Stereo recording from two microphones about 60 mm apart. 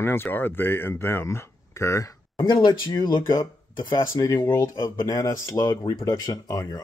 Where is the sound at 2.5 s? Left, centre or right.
Left.